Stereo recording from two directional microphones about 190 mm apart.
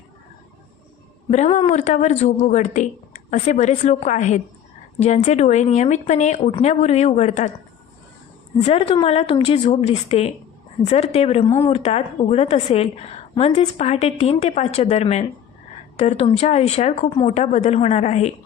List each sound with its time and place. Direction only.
1.3 s a woman's voice: 35° left (ahead or behind)
8.6 s a woman's voice: 30° left (ahead or behind)